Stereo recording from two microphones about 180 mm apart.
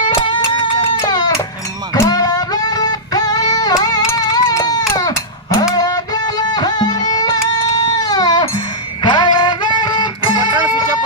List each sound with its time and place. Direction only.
0.0 s music: 25° left (ahead or behind)
1.0 s baby cry: 25° left (ahead or behind)
2.0 s music: 20° left (ahead or behind)